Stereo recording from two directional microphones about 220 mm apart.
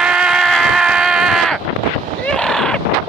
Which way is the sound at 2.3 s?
5° left (ahead or behind).